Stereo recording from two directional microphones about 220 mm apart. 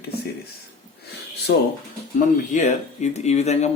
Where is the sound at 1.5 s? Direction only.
55° left (ahead or behind).